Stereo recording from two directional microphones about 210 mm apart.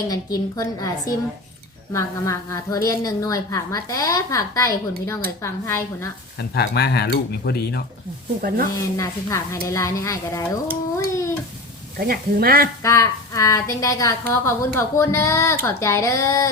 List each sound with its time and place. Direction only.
0.5 s a woman's voice: 15° left (ahead or behind)
6.5 s speech: 50° left (ahead or behind)
8.4 s speech: 45° right (ahead or behind)
8.7 s a woman's voice: 15° left (ahead or behind)
10.9 s a sound: 15° left (ahead or behind)
11.9 s speech: 45° right (ahead or behind)
12.8 s a woman's voice: 15° left (ahead or behind)